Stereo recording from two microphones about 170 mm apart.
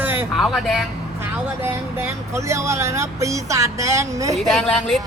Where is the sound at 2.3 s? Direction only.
15° right (ahead or behind).